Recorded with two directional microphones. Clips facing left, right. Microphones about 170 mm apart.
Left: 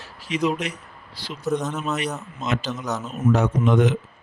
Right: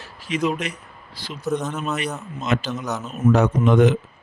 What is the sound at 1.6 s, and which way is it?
Speech, 5° left (ahead or behind).